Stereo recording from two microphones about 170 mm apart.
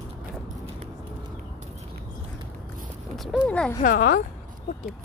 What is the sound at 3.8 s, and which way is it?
Speech, 55° left (ahead or behind).